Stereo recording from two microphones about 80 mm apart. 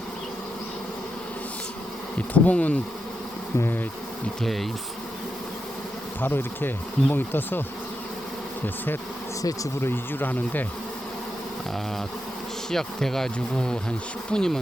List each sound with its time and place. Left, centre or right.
2.3 s speech: centre
4.4 s bee: centre
6.2 s speech: left
9.8 s speech: left
12.7 s speech: centre